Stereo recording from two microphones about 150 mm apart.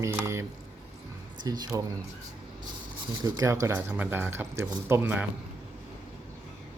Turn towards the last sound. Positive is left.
turn(degrees=-15)  # may be behind; listen again after turning